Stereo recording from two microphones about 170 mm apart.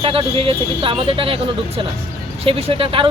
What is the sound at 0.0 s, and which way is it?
Speech, 30° right (ahead or behind).